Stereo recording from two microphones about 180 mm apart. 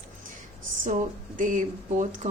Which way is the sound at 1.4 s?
45° right (ahead or behind).